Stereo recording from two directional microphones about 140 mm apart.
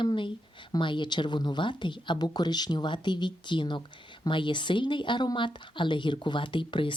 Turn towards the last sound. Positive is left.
turn(degrees=35)  # may be behind; listen again after turning